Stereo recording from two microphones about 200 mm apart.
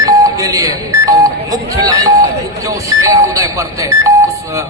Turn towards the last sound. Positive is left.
turn(degrees=-15)  # may be behind; listen again after turning